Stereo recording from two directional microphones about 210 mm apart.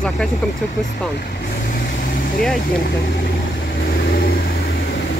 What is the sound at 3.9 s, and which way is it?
Vehicle, 45° left (ahead or behind).